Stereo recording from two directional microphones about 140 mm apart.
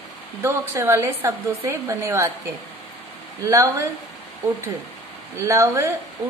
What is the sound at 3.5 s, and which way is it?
Speech, 20° right (ahead or behind).